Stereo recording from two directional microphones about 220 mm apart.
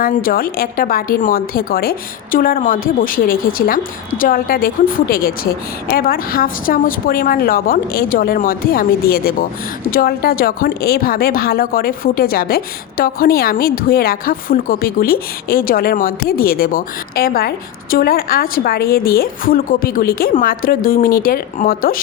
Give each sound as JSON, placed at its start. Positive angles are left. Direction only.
{"t": 0.0, "sound": "a woman's voice", "side_deg": 40}